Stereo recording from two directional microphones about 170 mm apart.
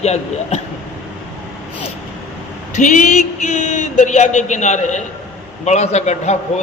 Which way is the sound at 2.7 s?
45° left (ahead or behind).